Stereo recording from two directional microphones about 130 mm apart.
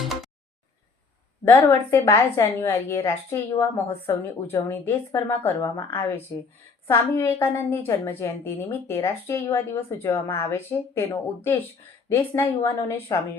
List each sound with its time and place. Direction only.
1.5 s a woman's voice: 20° left (ahead or behind)